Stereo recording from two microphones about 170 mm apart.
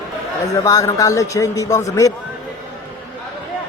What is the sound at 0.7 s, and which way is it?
Speech, 20° left (ahead or behind).